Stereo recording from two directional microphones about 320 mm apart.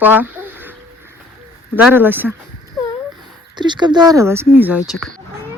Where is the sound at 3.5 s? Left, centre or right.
Centre.